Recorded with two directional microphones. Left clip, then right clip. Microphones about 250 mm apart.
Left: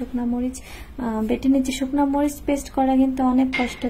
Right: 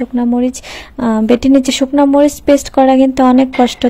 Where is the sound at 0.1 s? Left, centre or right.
Right.